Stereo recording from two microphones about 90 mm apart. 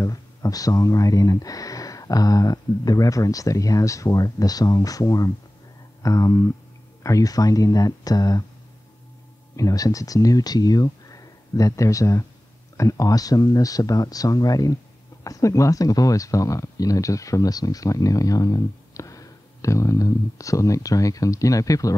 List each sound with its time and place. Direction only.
0.0 s speech: 40° left (ahead or behind)
9.6 s speech: 40° left (ahead or behind)